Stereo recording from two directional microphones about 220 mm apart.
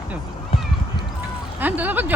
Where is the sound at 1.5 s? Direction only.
10° right (ahead or behind).